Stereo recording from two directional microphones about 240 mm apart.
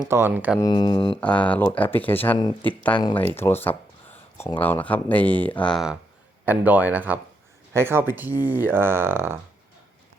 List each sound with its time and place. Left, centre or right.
0.0 s speech: centre
0.6 s speech: centre
1.2 s speech: centre
2.9 s speech: centre